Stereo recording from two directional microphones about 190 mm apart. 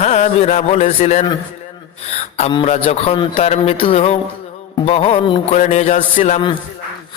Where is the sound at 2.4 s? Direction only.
35° left (ahead or behind).